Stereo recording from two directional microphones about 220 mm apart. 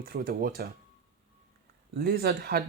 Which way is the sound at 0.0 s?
45° right (ahead or behind).